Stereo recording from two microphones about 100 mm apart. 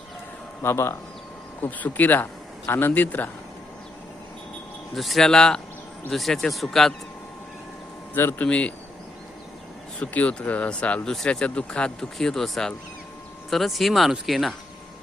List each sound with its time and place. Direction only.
0.6 s a man's voice: 25° left (ahead or behind)
4.9 s speech: centre (ahead or behind)
8.1 s a man's voice: 20° left (ahead or behind)
8.4 s speech: 10° left (ahead or behind)
10.0 s speech: 15° left (ahead or behind)